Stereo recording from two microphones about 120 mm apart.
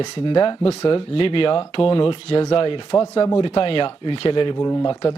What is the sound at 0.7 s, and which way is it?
Speech, 55° left (ahead or behind).